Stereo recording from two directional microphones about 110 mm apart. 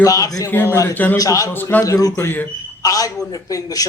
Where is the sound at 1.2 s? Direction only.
30° left (ahead or behind).